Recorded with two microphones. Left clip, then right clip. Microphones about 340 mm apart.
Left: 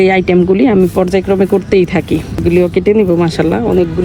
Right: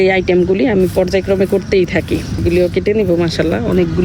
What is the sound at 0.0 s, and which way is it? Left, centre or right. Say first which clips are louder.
Speech: left 2 dB; centre.